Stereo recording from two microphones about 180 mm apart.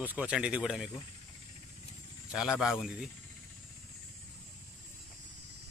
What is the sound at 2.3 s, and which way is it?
Speech, 5° right (ahead or behind).